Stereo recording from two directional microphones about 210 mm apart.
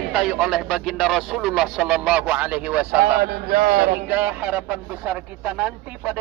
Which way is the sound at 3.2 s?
45° right (ahead or behind).